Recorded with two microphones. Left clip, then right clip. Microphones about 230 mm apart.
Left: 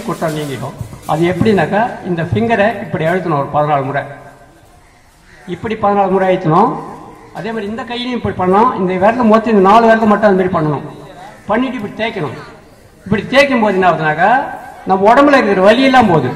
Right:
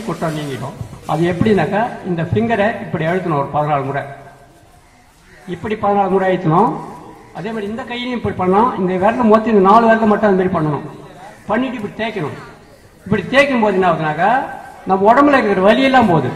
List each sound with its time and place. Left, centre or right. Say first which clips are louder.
0.2 s a man's voice: left 4 dB; left
5.5 s a man's voice: left 2 dB; left